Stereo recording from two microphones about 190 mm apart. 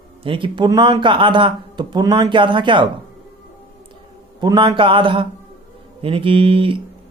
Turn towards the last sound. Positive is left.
turn(degrees=-30)  # may be behind; listen again after turning